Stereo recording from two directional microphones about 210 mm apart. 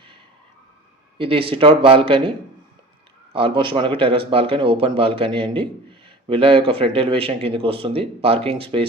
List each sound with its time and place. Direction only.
1.2 s speech: 25° right (ahead or behind)
3.3 s speech: 25° right (ahead or behind)